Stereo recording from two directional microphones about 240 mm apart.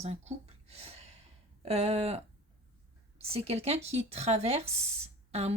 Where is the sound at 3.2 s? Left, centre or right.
Right.